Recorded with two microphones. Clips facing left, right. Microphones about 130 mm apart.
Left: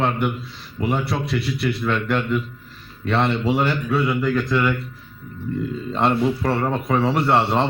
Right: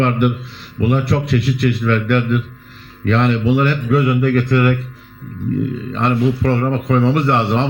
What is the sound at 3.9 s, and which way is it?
Speech, 65° right (ahead or behind).